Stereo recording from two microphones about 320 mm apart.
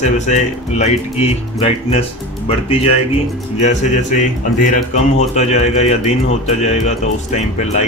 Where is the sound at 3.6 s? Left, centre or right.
Left.